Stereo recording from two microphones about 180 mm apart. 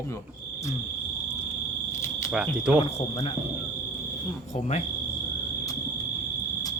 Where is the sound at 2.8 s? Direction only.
35° left (ahead or behind).